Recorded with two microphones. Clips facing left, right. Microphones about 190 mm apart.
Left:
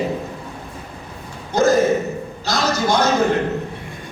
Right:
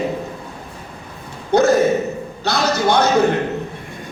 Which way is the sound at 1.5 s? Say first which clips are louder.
Right 3 dB; 65° right (ahead or behind).